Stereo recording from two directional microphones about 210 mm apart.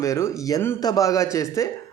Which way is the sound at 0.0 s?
15° left (ahead or behind).